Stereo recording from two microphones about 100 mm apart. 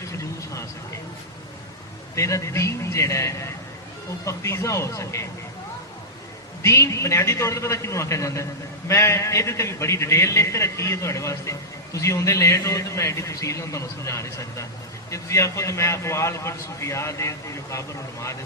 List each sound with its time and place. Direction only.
0.1 s a sound: 30° left (ahead or behind)
2.1 s a man's voice: 30° left (ahead or behind)
6.6 s a man's voice: 30° left (ahead or behind)